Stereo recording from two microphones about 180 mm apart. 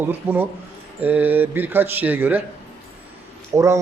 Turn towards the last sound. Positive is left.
turn(degrees=-15)  # may be behind; listen again after turning